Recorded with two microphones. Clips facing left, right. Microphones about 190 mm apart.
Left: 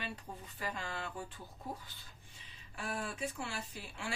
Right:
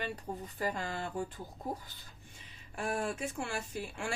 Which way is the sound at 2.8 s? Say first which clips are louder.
Right 5 dB; 50° right (ahead or behind).